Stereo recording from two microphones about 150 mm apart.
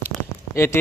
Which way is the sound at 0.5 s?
15° left (ahead or behind).